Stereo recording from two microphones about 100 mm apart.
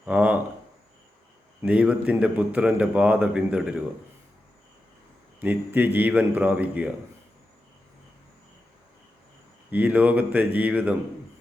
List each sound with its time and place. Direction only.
0.0 s speech: 15° right (ahead or behind)
1.6 s a man's voice: 10° right (ahead or behind)
5.4 s a man's voice: 20° right (ahead or behind)
9.7 s a man's voice: 15° right (ahead or behind)